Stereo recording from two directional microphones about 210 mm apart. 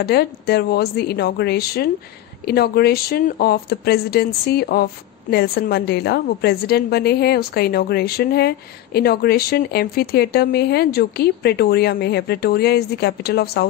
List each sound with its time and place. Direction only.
0.0 s a woman's voice: 50° left (ahead or behind)